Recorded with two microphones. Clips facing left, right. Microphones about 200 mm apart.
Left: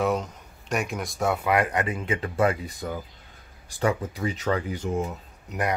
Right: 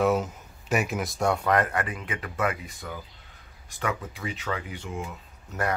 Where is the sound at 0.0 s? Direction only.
5° right (ahead or behind); by 5.1 s 40° left (ahead or behind).